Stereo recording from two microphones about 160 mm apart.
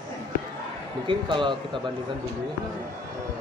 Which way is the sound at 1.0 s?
30° right (ahead or behind).